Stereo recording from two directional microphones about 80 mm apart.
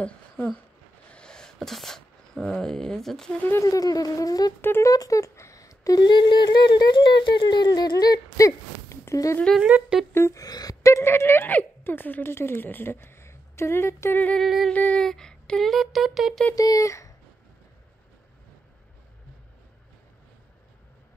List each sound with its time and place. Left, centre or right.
0.0 s speech: centre
3.6 s speech: left
4.6 s a sound: left
4.8 s speech: left
6.0 s a sound: left
9.6 s speech: centre
10.1 s speech: left
10.4 s speech: left
14.1 s a sound: centre
14.4 s speech: centre
14.7 s a sound: centre
15.0 s speech: centre
16.5 s speech: left